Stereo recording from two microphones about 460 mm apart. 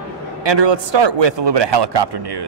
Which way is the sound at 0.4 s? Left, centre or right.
Right.